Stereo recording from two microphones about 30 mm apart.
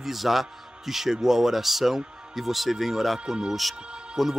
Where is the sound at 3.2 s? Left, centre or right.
Right.